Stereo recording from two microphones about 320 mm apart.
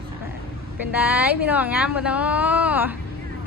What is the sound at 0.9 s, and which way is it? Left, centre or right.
A woman's voice, centre.